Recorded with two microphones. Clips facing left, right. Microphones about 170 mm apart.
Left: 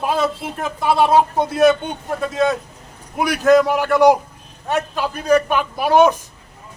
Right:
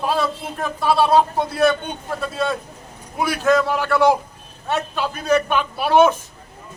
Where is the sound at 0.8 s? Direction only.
20° left (ahead or behind).